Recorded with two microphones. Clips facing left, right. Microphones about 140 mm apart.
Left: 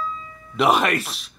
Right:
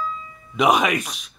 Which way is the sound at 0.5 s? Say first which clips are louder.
Even; centre (ahead or behind).